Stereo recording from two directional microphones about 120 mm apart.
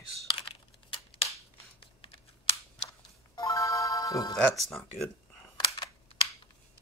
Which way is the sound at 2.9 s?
30° left (ahead or behind).